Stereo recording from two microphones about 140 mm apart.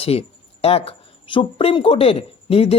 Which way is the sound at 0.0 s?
45° left (ahead or behind).